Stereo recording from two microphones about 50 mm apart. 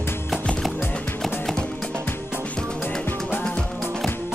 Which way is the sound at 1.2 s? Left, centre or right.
Centre.